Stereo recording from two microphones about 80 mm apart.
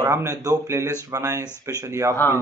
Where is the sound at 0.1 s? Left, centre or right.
Right.